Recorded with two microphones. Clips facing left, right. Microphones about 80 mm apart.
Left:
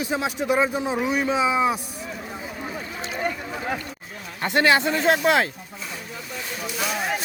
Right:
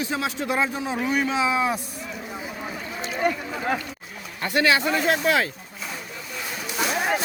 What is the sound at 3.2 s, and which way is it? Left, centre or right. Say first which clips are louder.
Speech: right 4 dB; centre.